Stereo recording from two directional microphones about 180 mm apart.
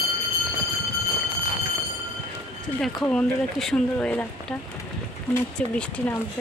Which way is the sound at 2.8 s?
5° left (ahead or behind).